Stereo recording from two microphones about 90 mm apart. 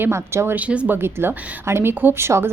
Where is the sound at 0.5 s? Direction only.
15° right (ahead or behind).